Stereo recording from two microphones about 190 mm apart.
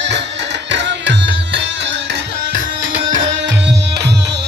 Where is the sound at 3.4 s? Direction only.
60° right (ahead or behind).